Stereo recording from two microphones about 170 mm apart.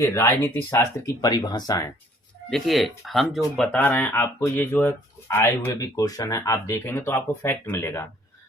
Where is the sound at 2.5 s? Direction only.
Centre (ahead or behind).